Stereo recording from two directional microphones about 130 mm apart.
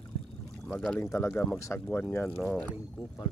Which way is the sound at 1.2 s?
20° left (ahead or behind).